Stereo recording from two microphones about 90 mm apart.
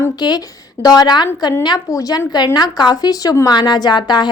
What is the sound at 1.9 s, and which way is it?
A woman's voice, 40° left (ahead or behind).